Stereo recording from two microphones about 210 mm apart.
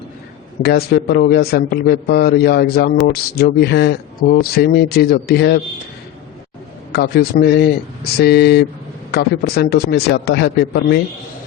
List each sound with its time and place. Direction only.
0.6 s a man's voice: 50° left (ahead or behind)
6.9 s a man's voice: 50° left (ahead or behind)